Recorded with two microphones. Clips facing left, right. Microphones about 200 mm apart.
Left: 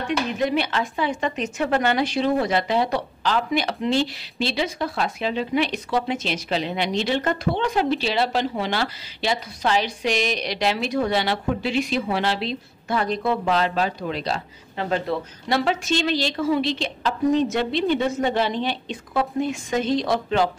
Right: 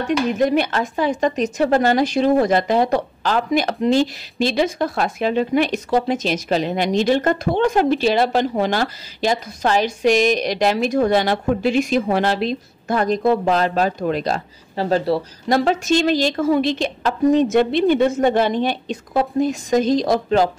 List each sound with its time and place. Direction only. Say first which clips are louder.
0.0 s speech: right 5 dB; 45° right (ahead or behind)
14.8 s speech: right 6 dB; 35° right (ahead or behind)